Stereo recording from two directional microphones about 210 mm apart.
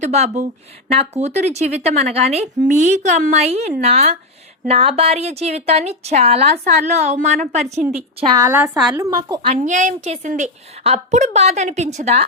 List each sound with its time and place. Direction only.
0.0 s a woman's voice: 30° right (ahead or behind)
8.4 s a woman's voice: 10° right (ahead or behind)
9.5 s a woman's voice: 35° right (ahead or behind)